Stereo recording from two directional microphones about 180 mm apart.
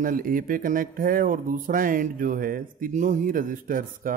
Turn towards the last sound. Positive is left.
turn(degrees=-50)  # may be behind; listen again after turning